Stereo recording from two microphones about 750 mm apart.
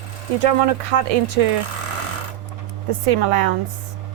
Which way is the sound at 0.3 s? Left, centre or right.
Right.